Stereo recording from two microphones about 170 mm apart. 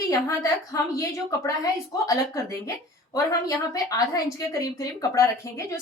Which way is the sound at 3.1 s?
20° left (ahead or behind).